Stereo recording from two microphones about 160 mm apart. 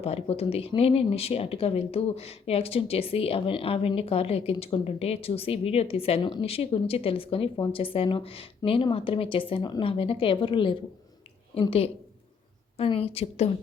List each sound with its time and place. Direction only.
0.0 s speech: 40° left (ahead or behind)
12.7 s speech: 35° left (ahead or behind)